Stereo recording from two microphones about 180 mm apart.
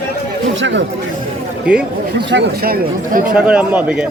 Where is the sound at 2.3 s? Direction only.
55° right (ahead or behind).